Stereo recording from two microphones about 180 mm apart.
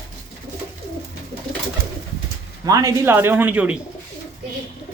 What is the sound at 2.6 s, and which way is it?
A man's voice, 20° right (ahead or behind).